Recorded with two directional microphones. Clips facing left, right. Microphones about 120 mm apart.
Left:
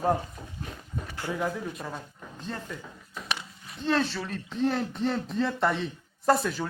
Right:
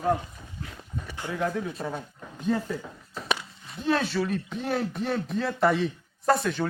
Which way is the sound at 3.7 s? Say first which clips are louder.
Right 1 dB; 5° right (ahead or behind).